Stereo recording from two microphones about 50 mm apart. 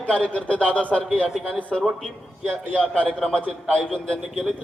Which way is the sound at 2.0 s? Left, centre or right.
Centre.